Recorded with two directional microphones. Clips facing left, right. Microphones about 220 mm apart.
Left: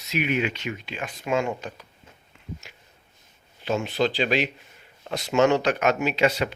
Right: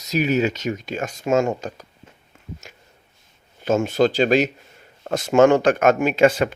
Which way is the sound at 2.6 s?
45° right (ahead or behind).